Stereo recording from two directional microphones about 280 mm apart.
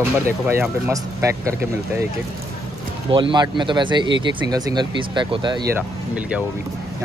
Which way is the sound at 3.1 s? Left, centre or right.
Centre.